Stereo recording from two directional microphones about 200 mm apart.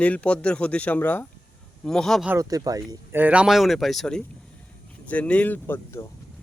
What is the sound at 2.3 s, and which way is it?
Speech, 15° right (ahead or behind).